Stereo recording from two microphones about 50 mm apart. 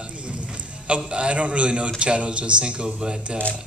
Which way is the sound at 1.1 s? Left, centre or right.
Right.